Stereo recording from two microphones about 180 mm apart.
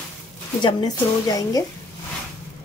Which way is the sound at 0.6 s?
25° left (ahead or behind).